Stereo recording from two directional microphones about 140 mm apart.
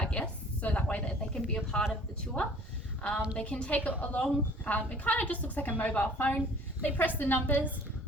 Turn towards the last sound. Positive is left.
turn(degrees=10)  # may be behind; listen again after turning